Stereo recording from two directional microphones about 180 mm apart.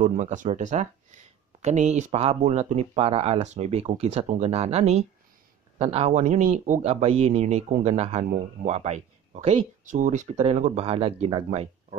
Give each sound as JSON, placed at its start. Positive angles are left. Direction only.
{"t": 0.0, "sound": "speech", "side_deg": -45}